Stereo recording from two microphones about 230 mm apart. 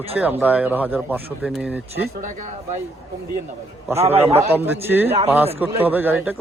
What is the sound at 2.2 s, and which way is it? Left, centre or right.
Speech, right.